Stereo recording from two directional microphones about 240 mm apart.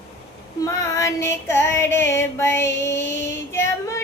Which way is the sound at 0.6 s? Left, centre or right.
Centre.